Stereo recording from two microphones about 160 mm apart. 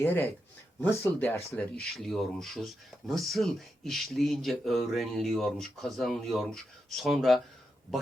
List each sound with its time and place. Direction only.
0.0 s speech: 15° left (ahead or behind); by 7.4 s centre (ahead or behind)